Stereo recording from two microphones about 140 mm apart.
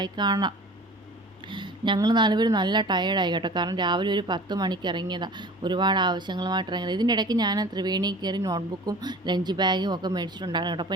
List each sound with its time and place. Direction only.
0.0 s a woman's voice: 30° right (ahead or behind)